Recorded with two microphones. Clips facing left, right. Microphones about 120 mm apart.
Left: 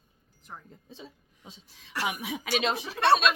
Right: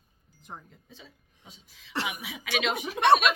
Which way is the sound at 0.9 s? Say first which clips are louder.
Left 5 dB; 35° left (ahead or behind).